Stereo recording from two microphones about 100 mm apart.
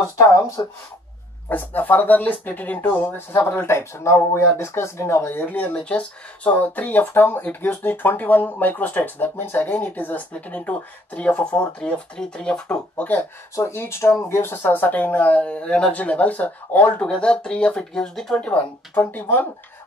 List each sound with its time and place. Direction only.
0.2 s speech: 30° left (ahead or behind)
1.5 s speech: 15° left (ahead or behind)